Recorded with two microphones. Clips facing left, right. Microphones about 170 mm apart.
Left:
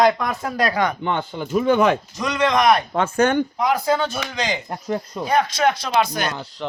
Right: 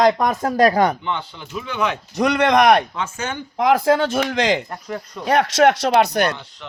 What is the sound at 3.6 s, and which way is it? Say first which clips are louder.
Speech: right 4 dB; 90° right.